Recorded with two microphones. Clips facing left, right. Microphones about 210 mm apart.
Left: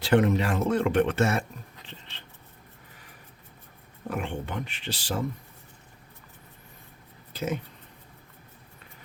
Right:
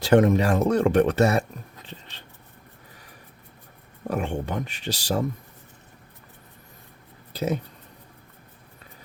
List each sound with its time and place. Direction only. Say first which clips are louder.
0.0 s speech: right 4 dB; 45° right (ahead or behind)
1.9 s writing: right 4 dB; 40° right (ahead or behind)
4.1 s speech: right 5 dB; 40° right (ahead or behind)
7.3 s speech: right 4 dB; 35° right (ahead or behind)